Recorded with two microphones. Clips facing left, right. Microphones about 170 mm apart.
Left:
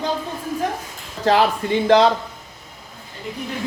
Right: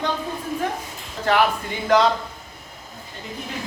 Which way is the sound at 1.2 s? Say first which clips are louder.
Left 3 dB; 30° left (ahead or behind).